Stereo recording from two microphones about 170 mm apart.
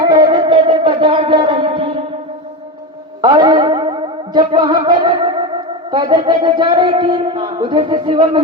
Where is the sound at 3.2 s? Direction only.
25° right (ahead or behind).